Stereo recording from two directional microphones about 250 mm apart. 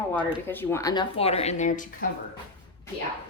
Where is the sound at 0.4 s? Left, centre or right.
Centre; by 1.9 s left.